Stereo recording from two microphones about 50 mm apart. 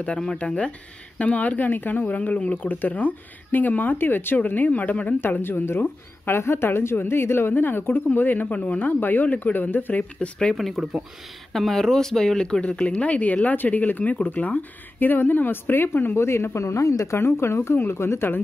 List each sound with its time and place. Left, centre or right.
0.4 s speech: left
5.2 s a woman's voice: left
10.1 s speech: left
10.5 s speech: centre; by 16.2 s left
16.2 s speech: left